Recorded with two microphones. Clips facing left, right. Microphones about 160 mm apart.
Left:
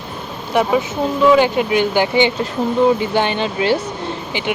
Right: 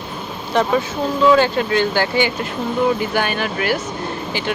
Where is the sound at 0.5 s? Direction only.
10° left (ahead or behind).